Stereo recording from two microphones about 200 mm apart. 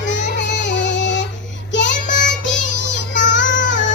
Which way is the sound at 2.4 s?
65° left (ahead or behind).